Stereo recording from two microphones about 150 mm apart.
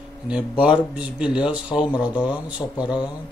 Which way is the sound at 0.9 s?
5° right (ahead or behind).